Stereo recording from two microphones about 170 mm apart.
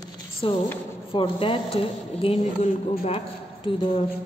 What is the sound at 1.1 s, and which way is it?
Speech, 30° left (ahead or behind).